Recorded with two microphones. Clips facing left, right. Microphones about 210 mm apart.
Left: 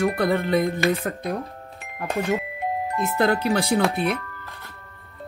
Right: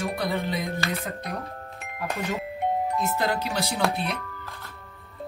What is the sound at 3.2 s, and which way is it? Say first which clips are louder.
Speech: left 6 dB; 55° left (ahead or behind).